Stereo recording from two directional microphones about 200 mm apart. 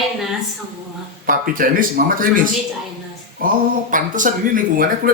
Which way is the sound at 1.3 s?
45° right (ahead or behind).